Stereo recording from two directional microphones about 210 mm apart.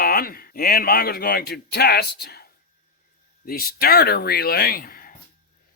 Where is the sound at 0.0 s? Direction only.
45° left (ahead or behind).